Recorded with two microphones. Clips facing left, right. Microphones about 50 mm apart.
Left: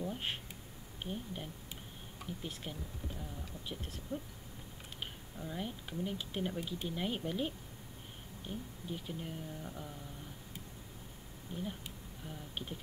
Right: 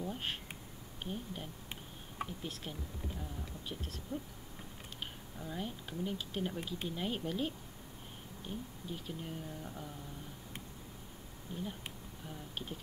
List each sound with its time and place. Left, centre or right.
0.0 s a sound: centre
1.0 s speech: centre
2.2 s a sound: right
3.2 s speech: centre
5.4 s speech: centre
11.5 s speech: centre
12.3 s speech: centre